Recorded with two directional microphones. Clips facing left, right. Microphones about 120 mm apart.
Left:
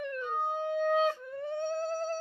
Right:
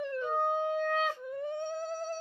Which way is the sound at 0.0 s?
25° right (ahead or behind).